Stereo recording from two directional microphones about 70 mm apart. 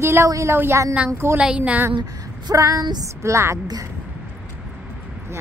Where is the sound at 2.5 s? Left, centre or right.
Right.